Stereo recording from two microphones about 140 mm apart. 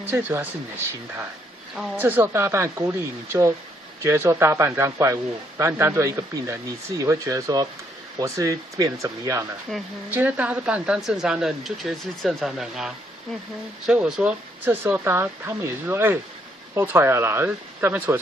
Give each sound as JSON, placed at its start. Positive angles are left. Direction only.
{"t": 0.0, "sound": "speech", "side_deg": -15}
{"t": 2.0, "sound": "speech", "side_deg": -15}
{"t": 10.1, "sound": "speech", "side_deg": -10}